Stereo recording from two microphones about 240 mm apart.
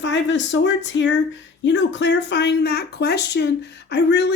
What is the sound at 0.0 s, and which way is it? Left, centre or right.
Speech, left.